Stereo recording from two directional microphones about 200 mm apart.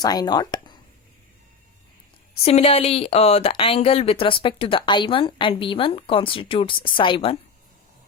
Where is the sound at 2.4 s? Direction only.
30° left (ahead or behind).